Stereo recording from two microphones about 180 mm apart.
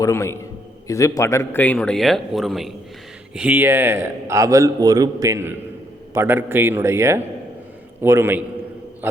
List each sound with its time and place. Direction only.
0.0 s a man's voice: 15° left (ahead or behind); by 8.4 s 10° right (ahead or behind)